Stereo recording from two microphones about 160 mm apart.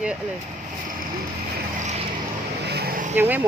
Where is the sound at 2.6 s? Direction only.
85° right.